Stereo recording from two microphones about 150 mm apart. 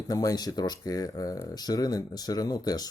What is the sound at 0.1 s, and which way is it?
Speech, 25° left (ahead or behind).